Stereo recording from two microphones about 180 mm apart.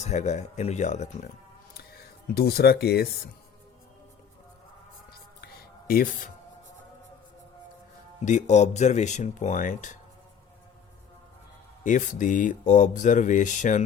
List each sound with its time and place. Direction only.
0.0 s speech: 40° left (ahead or behind)
1.7 s a sound: 60° left (ahead or behind)
5.9 s speech: 50° left (ahead or behind)
8.2 s speech: 40° left (ahead or behind)
11.8 s speech: 45° left (ahead or behind)